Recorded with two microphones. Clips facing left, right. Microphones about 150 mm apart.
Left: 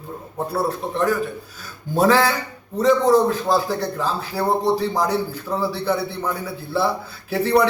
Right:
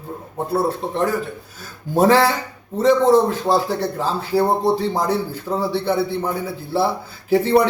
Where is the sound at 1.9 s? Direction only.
30° right (ahead or behind).